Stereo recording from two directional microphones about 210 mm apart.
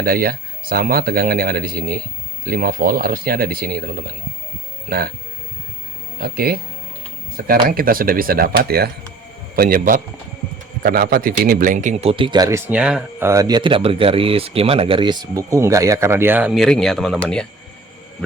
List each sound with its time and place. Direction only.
0.0 s speech: 45° right (ahead or behind)
6.1 s a man's voice: 45° right (ahead or behind); by 17.4 s centre (ahead or behind)